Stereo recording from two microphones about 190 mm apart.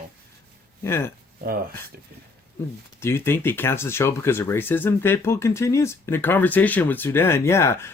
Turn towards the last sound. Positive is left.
turn(degrees=15)  # may be behind; listen again after turning